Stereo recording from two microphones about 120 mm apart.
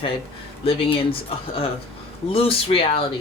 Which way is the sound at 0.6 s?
55° left (ahead or behind).